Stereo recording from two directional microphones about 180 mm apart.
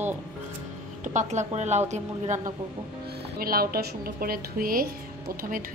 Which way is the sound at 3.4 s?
55° right (ahead or behind).